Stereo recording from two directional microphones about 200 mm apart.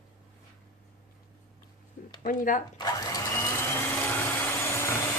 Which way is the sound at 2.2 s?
45° left (ahead or behind).